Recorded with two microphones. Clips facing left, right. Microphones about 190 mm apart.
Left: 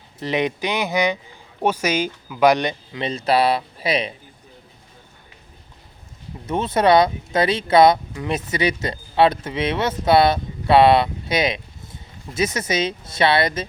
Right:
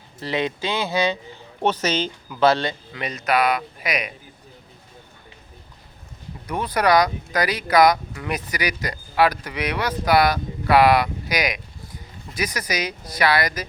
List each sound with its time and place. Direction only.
0.2 s speech: 20° left (ahead or behind)
6.4 s speech: 25° left (ahead or behind)